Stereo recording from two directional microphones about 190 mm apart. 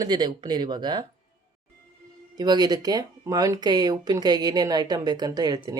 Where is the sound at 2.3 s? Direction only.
20° right (ahead or behind).